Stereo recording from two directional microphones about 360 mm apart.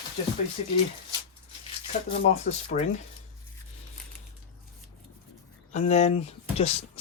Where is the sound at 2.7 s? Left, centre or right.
Left.